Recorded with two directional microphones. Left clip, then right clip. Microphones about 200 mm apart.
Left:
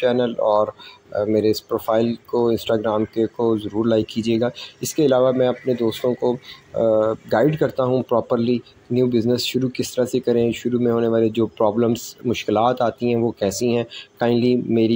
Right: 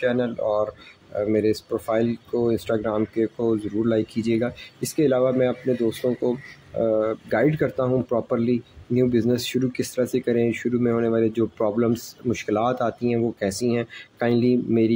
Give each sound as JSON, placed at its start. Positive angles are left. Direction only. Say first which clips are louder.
{"t": 0.0, "sound": "speech", "louder": "left 5 dB", "side_deg": 0}